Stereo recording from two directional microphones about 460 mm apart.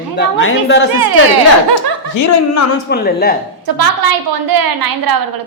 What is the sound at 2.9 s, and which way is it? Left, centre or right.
Speech, centre.